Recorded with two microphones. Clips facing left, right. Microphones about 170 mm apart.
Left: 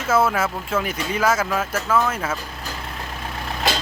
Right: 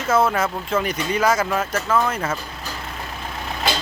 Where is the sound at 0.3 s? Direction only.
5° left (ahead or behind).